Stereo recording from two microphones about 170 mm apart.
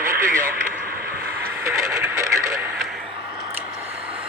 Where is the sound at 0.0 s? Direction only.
15° right (ahead or behind).